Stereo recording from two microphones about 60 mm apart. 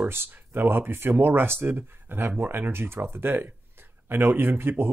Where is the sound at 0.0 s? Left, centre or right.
Right.